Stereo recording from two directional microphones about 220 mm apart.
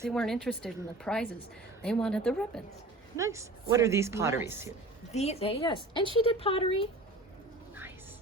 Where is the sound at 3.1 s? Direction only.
15° right (ahead or behind).